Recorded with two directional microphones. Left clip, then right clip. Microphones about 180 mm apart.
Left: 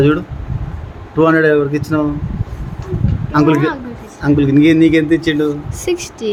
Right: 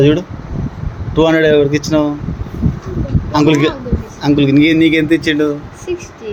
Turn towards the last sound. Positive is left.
turn(degrees=40)  # may be behind; listen again after turning